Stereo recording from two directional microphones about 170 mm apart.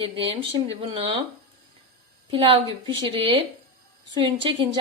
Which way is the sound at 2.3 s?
30° right (ahead or behind).